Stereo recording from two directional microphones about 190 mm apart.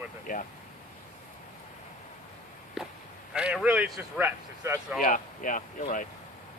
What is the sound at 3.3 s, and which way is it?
A man's voice, 5° right (ahead or behind).